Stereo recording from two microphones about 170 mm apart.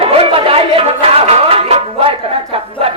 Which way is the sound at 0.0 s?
35° right (ahead or behind).